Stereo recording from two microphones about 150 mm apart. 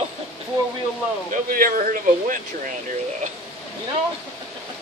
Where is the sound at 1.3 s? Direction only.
70° right (ahead or behind).